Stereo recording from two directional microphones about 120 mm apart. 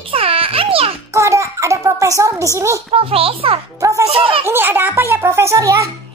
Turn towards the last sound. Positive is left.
turn(degrees=-25)  # may be behind; listen again after turning